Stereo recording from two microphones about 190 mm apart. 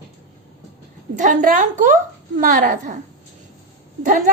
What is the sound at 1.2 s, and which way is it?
A woman's voice, 45° right (ahead or behind).